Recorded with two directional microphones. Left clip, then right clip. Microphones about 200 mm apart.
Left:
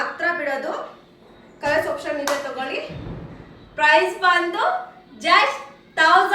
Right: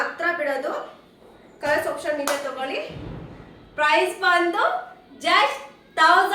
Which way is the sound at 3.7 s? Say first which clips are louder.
Left 3 dB; 20° right (ahead or behind).